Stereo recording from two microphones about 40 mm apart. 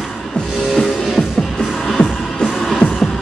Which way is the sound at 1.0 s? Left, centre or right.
Centre.